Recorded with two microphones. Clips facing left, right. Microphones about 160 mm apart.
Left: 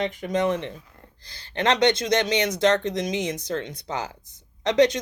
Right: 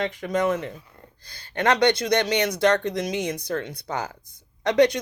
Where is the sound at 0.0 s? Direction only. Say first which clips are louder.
Even; 20° left (ahead or behind).